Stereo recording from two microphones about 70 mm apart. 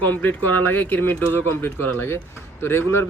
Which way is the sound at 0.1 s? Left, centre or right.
Left.